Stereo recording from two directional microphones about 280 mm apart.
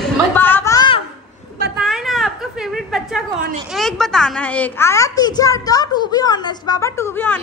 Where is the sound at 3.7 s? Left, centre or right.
Centre.